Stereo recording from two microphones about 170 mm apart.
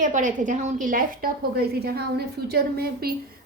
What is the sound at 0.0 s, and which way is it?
A woman's voice, 50° right (ahead or behind).